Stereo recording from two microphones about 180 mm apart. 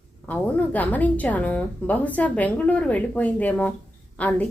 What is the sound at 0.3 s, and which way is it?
A woman's voice, 10° left (ahead or behind).